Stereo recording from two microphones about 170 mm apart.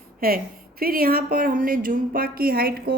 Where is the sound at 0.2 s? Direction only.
60° right (ahead or behind).